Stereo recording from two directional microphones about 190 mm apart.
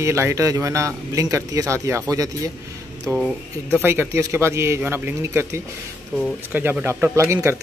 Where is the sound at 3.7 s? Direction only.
10° right (ahead or behind).